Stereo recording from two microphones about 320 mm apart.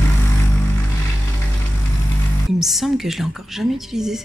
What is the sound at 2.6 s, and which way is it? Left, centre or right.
A woman's voice, centre.